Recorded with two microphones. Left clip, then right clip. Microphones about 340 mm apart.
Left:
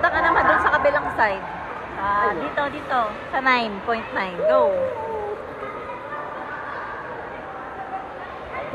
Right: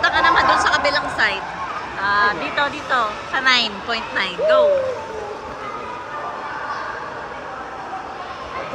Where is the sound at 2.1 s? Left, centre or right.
Centre.